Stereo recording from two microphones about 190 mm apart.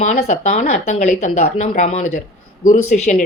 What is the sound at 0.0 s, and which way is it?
A woman's voice, 40° left (ahead or behind).